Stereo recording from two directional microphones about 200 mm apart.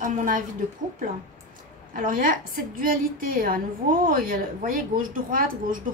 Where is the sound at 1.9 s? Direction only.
40° right (ahead or behind).